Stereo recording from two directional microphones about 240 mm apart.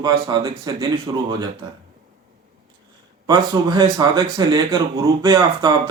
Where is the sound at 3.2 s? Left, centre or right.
Centre.